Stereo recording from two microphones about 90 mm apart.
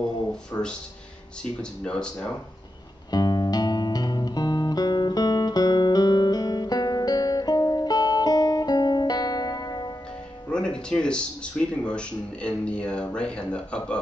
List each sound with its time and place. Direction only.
0.3 s speech: 10° left (ahead or behind)
3.1 s music: 50° left (ahead or behind)
10.5 s speech: 10° left (ahead or behind)